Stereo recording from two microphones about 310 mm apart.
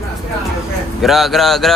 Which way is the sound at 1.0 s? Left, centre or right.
Centre.